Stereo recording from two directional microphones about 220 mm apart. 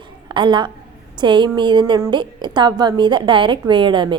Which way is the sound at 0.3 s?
20° right (ahead or behind).